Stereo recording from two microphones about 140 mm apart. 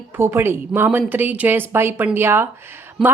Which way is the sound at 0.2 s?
15° right (ahead or behind).